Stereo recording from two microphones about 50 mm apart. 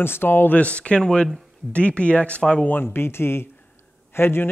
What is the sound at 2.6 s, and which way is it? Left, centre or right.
Speech, left.